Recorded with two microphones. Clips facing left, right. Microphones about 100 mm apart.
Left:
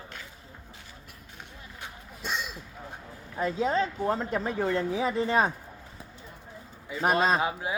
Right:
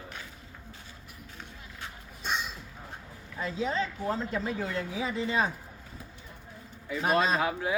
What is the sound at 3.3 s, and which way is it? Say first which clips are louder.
A woman's voice: left 4 dB; 40° left (ahead or behind).